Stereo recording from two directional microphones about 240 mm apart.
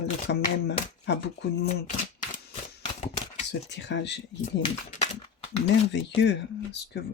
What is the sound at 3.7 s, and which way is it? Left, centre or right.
Speech, left.